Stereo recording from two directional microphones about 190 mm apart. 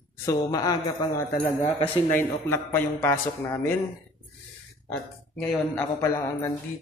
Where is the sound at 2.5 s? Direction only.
10° left (ahead or behind).